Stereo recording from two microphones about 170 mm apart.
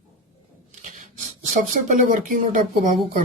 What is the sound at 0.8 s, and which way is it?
Rub, 50° right (ahead or behind).